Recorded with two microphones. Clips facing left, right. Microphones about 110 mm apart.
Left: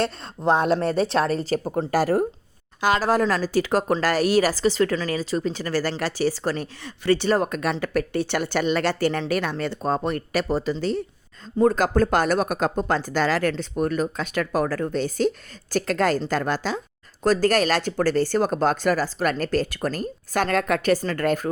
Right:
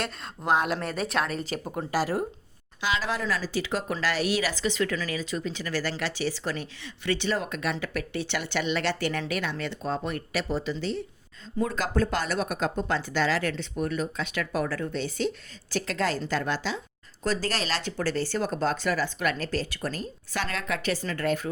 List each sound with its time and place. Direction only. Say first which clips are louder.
0.0 s speech: left 8 dB; 30° left (ahead or behind); by 21.5 s 50° left (ahead or behind)